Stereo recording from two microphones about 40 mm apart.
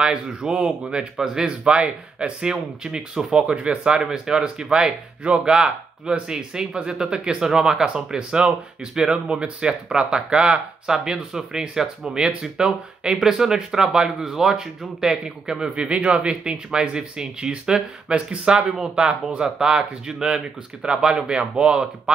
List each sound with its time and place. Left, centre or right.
0.0 s speech: right